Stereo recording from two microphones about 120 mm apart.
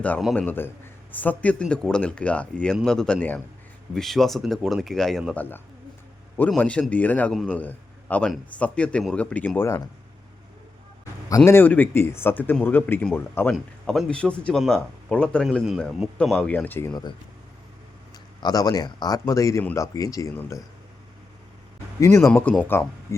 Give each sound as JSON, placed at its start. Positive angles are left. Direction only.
{"t": 0.3, "sound": "speech", "side_deg": 15}
{"t": 5.3, "sound": "a man's voice", "side_deg": 15}
{"t": 11.3, "sound": "speech", "side_deg": 25}
{"t": 13.5, "sound": "speech", "side_deg": 0}
{"t": 15.4, "sound": "speech", "side_deg": 0}
{"t": 18.4, "sound": "speech", "side_deg": 35}
{"t": 22.0, "sound": "speech", "side_deg": 20}